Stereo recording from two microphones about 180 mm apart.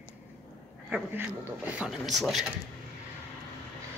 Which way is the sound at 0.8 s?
5° right (ahead or behind).